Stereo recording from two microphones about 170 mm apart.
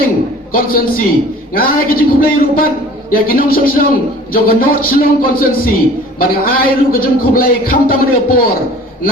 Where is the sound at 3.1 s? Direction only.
60° left (ahead or behind).